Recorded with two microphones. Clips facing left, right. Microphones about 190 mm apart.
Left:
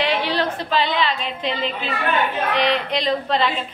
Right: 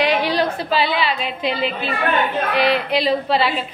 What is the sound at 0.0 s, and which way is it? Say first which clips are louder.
A woman's voice: right 3 dB; 15° right (ahead or behind).